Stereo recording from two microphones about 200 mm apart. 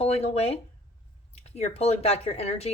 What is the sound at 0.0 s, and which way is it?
Speech, 30° left (ahead or behind).